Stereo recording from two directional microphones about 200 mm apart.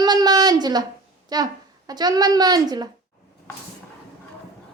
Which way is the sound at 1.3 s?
20° right (ahead or behind).